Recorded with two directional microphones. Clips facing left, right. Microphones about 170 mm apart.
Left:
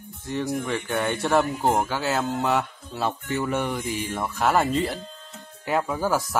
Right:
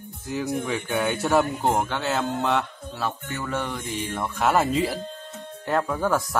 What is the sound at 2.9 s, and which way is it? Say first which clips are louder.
Speech: left 4 dB; 20° left (ahead or behind).